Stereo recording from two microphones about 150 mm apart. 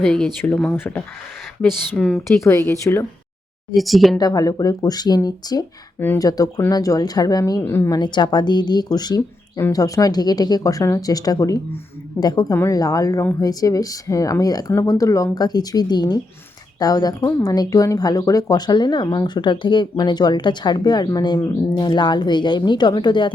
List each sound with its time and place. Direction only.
0.0 s speech: 5° left (ahead or behind)
2.4 s speech: 15° left (ahead or behind)
3.8 s speech: centre (ahead or behind)
4.2 s speech: 25° left (ahead or behind)
7.9 s speech: 30° left (ahead or behind)